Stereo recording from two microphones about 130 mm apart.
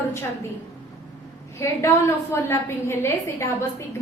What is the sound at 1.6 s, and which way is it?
A woman's voice, 20° left (ahead or behind).